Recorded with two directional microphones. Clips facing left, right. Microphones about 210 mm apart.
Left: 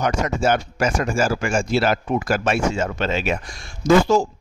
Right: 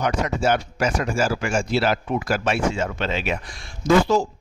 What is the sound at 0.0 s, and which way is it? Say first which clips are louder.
A man's voice: left 1 dB; 45° left (ahead or behind).